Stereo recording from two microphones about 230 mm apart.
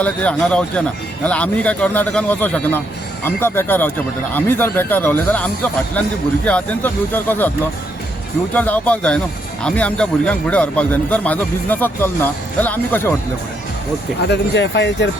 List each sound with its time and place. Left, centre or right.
0.0 s a man's voice: centre
8.5 s a man's voice: centre
14.2 s speech: left